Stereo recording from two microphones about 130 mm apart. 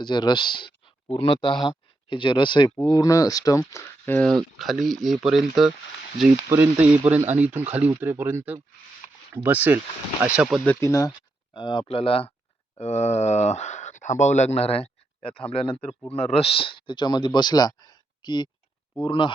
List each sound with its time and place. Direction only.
0.0 s speech: 35° left (ahead or behind)
2.9 s speech: 25° left (ahead or behind)
4.5 s speech: centre (ahead or behind)
6.5 s speech: 15° right (ahead or behind)
10.8 s speech: 25° left (ahead or behind)
11.5 s speech: 40° left (ahead or behind)
12.7 s speech: 55° left (ahead or behind)
15.9 s speech: 10° left (ahead or behind)
16.1 s speech: 50° left (ahead or behind)